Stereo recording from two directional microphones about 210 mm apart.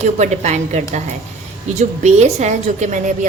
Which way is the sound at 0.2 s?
35° right (ahead or behind).